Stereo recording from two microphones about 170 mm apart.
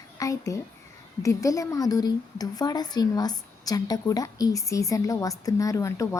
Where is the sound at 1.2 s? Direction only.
20° left (ahead or behind).